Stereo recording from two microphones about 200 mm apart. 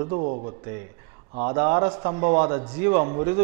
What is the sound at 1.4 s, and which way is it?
Speech, 15° right (ahead or behind).